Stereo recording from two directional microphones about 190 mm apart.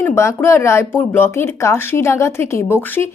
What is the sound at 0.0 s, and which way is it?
A woman's voice, 10° left (ahead or behind).